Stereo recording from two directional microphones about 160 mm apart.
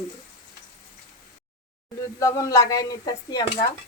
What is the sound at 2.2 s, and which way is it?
Speech, 20° left (ahead or behind).